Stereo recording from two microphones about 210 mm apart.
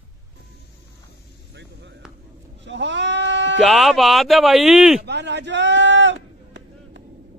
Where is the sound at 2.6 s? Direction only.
60° right (ahead or behind).